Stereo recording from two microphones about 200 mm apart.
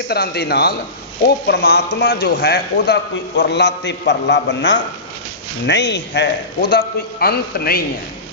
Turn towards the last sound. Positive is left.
turn(degrees=50)  # may be behind; listen again after turning